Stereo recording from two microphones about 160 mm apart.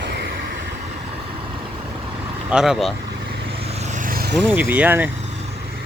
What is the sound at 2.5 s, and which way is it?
Speech, 5° right (ahead or behind).